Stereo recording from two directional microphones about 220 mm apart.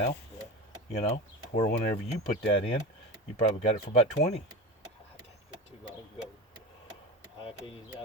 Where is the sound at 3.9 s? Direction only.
30° left (ahead or behind).